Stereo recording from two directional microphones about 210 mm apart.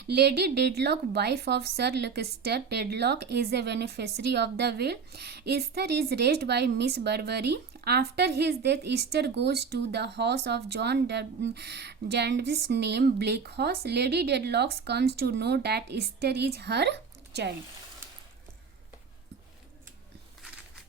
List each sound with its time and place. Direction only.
0.0 s a woman's voice: 50° right (ahead or behind)